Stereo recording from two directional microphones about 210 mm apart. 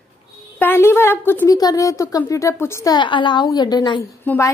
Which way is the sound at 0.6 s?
10° left (ahead or behind).